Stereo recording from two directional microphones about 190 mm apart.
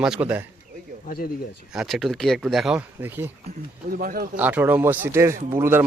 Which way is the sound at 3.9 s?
50° right (ahead or behind).